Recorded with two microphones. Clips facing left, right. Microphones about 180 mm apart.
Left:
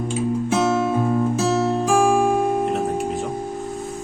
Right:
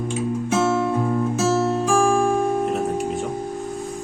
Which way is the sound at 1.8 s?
15° left (ahead or behind).